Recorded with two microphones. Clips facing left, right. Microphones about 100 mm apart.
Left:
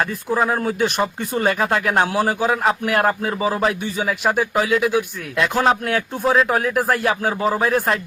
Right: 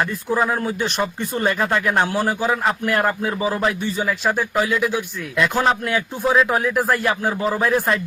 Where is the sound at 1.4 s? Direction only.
5° left (ahead or behind).